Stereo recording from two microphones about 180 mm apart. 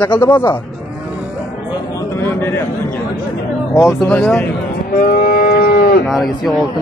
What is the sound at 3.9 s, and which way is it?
Speech, 5° left (ahead or behind).